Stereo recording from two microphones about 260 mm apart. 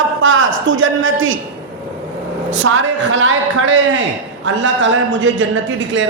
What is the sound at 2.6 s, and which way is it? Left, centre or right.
A man's voice, right.